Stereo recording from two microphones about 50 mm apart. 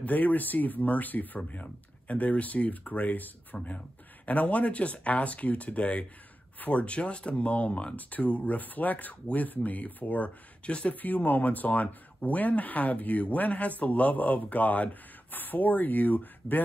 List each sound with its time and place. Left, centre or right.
0.0 s speech: left
11.0 s speech: left